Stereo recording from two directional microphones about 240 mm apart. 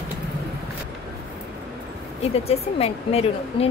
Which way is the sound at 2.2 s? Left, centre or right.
Left.